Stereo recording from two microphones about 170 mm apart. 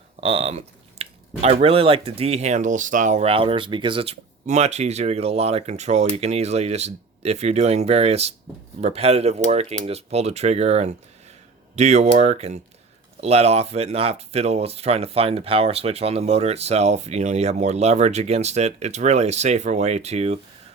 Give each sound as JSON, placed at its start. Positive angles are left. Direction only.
{"t": 0.2, "sound": "speech", "side_deg": -35}